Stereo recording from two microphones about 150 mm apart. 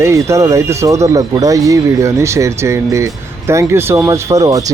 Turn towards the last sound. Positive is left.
turn(degrees=-20)  # may be behind; listen again after turning